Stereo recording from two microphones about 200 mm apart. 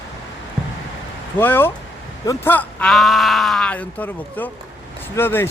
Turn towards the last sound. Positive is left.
turn(degrees=10)  # may be behind; listen again after turning